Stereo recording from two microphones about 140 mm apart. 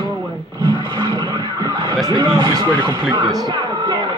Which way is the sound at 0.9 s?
30° right (ahead or behind).